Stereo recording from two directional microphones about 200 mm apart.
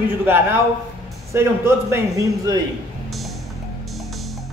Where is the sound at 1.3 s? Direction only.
15° right (ahead or behind).